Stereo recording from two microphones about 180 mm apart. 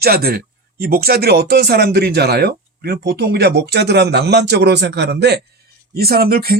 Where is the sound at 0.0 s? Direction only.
60° right (ahead or behind).